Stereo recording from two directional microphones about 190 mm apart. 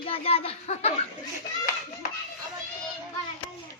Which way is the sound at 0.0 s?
30° left (ahead or behind).